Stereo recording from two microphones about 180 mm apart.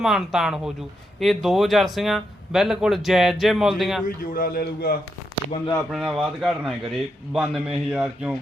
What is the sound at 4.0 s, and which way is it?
Speech, 50° left (ahead or behind).